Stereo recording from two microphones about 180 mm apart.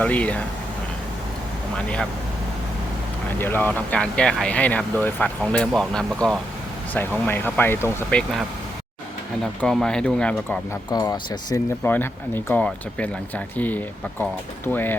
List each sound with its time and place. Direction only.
0.0 s speech: 10° left (ahead or behind)
3.3 s speech: 10° left (ahead or behind)
9.6 s speech: 5° left (ahead or behind)
10.8 s speech: 20° left (ahead or behind)